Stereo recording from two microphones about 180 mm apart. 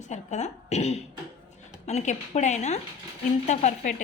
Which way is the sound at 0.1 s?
40° left (ahead or behind).